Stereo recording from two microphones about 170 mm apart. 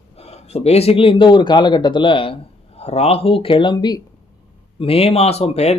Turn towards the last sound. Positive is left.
turn(degrees=40)  # may be behind; listen again after turning